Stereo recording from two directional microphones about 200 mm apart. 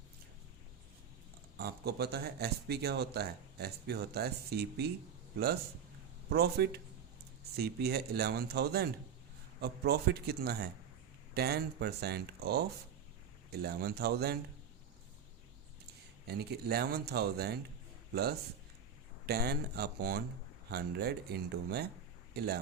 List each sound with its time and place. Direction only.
1.5 s speech: 55° right (ahead or behind)
6.3 s speech: 50° right (ahead or behind)
16.2 s speech: 55° right (ahead or behind)